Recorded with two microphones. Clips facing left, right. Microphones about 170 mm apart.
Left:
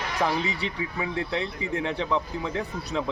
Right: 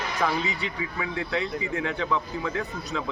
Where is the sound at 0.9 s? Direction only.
25° left (ahead or behind).